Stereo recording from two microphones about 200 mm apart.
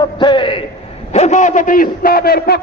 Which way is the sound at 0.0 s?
25° left (ahead or behind).